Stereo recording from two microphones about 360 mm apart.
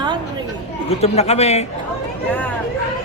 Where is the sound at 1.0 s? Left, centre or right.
Centre.